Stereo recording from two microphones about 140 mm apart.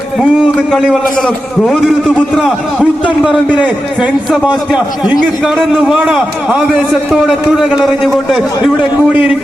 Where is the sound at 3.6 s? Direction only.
10° right (ahead or behind).